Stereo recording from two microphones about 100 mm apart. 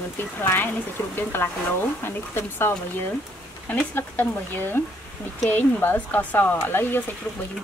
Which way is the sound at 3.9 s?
20° left (ahead or behind).